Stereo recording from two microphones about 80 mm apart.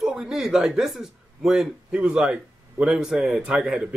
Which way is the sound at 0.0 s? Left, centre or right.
Centre.